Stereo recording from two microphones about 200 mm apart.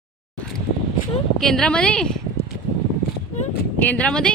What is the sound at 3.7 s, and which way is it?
Speech, 5° left (ahead or behind).